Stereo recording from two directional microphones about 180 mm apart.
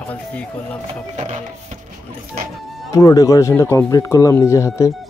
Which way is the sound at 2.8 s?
20° left (ahead or behind).